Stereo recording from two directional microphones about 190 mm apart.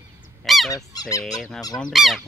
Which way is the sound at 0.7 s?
15° left (ahead or behind).